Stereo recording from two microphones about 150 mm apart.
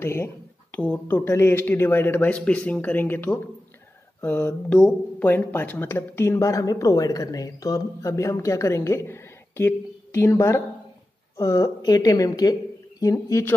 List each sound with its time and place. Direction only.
0.0 s speech: 15° left (ahead or behind)